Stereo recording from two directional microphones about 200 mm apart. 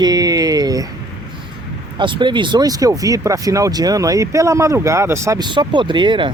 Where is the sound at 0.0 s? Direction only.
20° right (ahead or behind).